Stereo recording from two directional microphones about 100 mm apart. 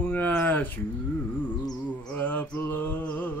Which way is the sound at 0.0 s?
15° left (ahead or behind).